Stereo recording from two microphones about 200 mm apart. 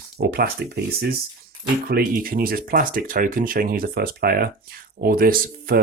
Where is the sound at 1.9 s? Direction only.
50° right (ahead or behind).